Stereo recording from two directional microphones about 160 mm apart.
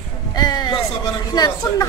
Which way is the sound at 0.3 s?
25° left (ahead or behind).